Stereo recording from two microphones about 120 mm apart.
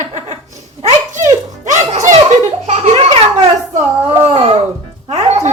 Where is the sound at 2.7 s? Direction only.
60° right (ahead or behind).